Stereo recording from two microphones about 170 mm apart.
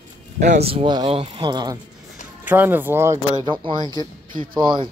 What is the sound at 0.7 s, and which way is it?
Speech, 30° right (ahead or behind).